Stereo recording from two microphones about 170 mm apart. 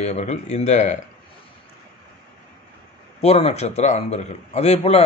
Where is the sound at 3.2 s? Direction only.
35° left (ahead or behind).